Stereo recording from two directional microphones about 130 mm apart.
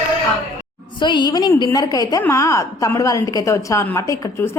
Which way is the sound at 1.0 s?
35° left (ahead or behind).